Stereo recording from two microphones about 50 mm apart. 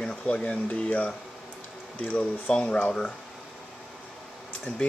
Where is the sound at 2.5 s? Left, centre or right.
Centre.